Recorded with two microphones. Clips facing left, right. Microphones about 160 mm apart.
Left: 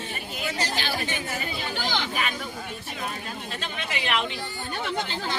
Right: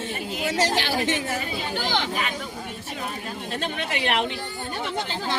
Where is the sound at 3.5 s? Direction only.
55° right (ahead or behind).